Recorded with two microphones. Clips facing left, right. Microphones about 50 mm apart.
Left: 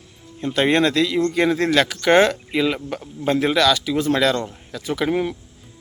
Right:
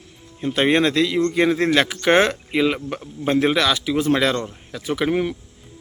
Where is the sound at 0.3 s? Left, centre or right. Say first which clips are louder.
Even; centre.